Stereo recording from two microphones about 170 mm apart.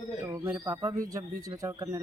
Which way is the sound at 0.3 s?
15° right (ahead or behind).